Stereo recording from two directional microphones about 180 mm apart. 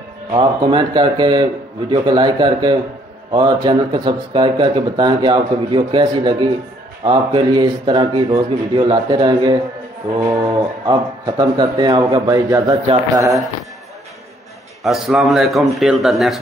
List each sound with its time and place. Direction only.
0.3 s speech: 25° right (ahead or behind)
14.8 s a man's voice: centre (ahead or behind)